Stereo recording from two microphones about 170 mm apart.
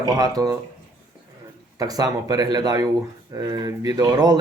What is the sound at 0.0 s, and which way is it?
Speech, 20° right (ahead or behind).